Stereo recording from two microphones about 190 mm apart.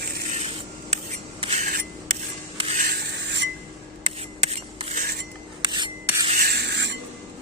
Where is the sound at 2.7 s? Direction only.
55° right (ahead or behind).